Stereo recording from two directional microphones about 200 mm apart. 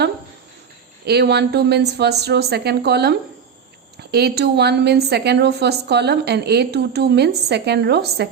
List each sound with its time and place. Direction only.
1.0 s a woman's voice: 55° right (ahead or behind)